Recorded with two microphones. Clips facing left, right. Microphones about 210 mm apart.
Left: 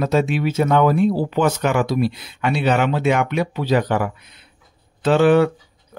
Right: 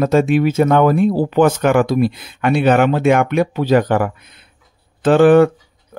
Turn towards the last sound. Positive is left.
turn(degrees=-50)  # may be behind; listen again after turning